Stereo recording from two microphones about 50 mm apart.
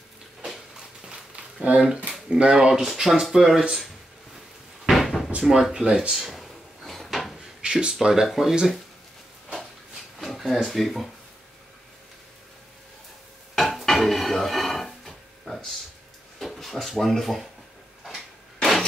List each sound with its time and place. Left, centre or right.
1.0 s a sound: centre
2.2 s speech: centre
4.8 s cupboard open or close: centre
5.4 s speech: centre
6.3 s drawer open or close: centre
7.6 s speech: centre
10.1 s speech: centre
13.6 s dishes: centre
16.3 s drawer open or close: centre